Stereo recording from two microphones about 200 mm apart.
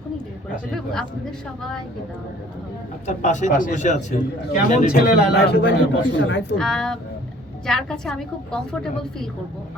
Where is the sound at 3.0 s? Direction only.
35° left (ahead or behind).